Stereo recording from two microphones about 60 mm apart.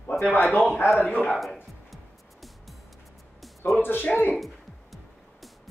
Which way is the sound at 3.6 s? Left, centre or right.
Left.